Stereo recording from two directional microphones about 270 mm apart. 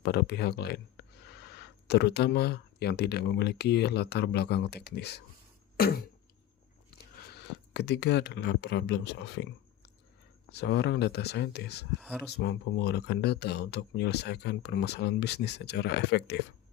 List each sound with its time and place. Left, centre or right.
0.0 s speech: left
5.7 s beatboxing: left
7.7 s speech: left
10.5 s speech: left
11.9 s speech: centre
12.3 s speech: left